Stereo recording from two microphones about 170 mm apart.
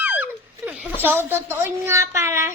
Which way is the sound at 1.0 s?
10° right (ahead or behind).